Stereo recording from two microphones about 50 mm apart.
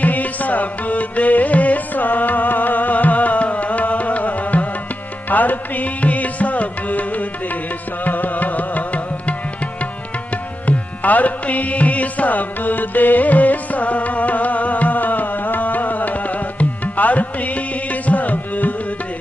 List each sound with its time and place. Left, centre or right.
0.0 s music: left
10.7 s music: left